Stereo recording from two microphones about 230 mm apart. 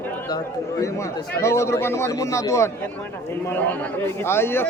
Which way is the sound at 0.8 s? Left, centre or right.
Centre.